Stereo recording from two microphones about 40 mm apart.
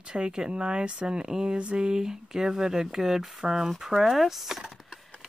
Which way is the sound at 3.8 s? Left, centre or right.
Centre.